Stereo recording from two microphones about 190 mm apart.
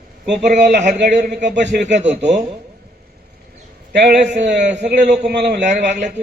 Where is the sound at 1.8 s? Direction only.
35° right (ahead or behind).